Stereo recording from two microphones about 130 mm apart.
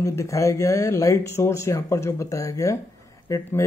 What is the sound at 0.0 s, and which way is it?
Speech, 20° left (ahead or behind).